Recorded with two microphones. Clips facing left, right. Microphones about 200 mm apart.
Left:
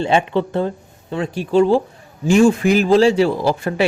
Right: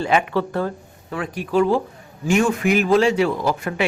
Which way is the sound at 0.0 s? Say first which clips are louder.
Left 3 dB; 25° left (ahead or behind).